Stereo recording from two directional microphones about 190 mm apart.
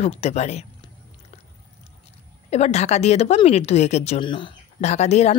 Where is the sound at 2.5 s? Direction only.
35° left (ahead or behind).